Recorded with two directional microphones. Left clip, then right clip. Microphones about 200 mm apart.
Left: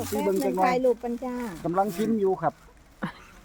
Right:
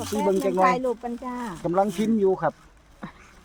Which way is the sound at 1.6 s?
50° right (ahead or behind).